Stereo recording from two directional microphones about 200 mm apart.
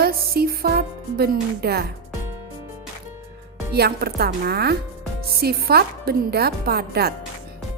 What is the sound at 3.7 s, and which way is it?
A woman's voice, 50° right (ahead or behind).